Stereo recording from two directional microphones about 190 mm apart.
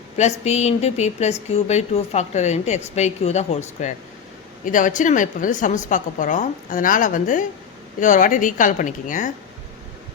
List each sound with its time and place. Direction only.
0.2 s a woman's voice: 35° left (ahead or behind)